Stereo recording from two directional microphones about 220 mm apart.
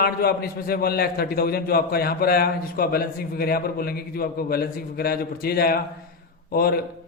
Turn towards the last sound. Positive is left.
turn(degrees=45)  # may be behind; listen again after turning